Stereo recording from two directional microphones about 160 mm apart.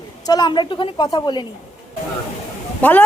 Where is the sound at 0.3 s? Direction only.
25° left (ahead or behind).